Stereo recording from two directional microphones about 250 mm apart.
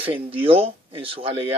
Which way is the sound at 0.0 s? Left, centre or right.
Right.